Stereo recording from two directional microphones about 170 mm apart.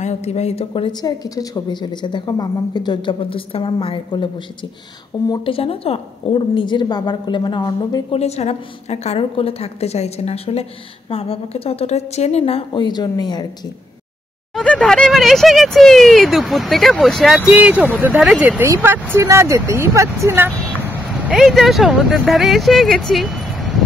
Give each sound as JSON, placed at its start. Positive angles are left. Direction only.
{"t": 0.0, "sound": "a woman's voice", "side_deg": 40}
{"t": 5.3, "sound": "a woman's voice", "side_deg": 30}
{"t": 8.2, "sound": "a woman's voice", "side_deg": 40}
{"t": 14.5, "sound": "speech", "side_deg": 5}